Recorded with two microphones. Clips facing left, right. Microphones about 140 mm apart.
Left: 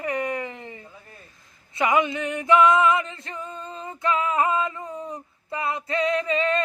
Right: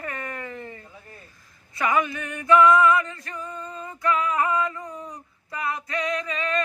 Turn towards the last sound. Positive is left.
turn(degrees=30)  # may be behind; listen again after turning